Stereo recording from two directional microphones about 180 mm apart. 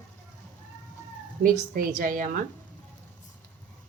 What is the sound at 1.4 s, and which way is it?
Speech, 50° right (ahead or behind).